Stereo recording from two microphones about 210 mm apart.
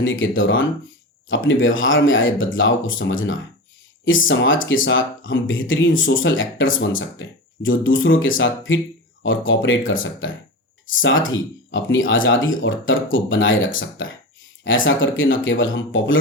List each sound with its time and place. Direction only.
0.0 s speech: 65° left (ahead or behind)